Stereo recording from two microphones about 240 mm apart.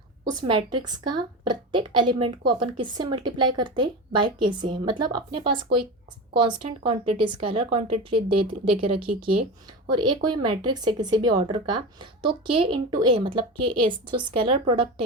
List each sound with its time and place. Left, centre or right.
0.3 s a woman's voice: centre
6.6 s a woman's voice: right